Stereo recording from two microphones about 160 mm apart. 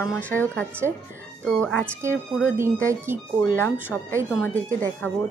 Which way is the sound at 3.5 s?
15° left (ahead or behind).